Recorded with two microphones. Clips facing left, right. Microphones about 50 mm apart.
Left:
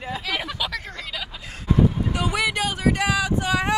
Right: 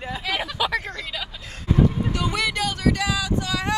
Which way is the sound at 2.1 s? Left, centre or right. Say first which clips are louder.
Left 1 dB; centre.